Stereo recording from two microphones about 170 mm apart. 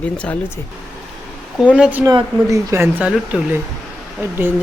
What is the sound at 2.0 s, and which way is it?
Speech, 20° right (ahead or behind).